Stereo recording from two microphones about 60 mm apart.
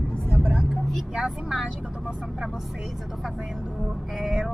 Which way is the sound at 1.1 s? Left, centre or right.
Centre.